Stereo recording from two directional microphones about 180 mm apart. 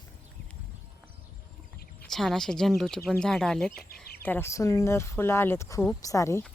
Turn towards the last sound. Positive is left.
turn(degrees=15)  # may be behind; listen again after turning